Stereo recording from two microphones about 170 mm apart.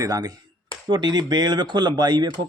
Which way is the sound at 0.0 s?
20° right (ahead or behind).